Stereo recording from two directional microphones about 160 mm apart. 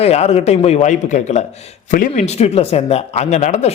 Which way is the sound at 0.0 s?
40° left (ahead or behind).